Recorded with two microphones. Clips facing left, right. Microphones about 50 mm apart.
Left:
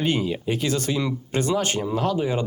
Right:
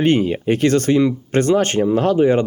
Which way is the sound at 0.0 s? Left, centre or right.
Right.